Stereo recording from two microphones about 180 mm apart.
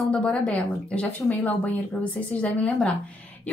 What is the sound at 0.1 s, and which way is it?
A woman's voice, 5° left (ahead or behind).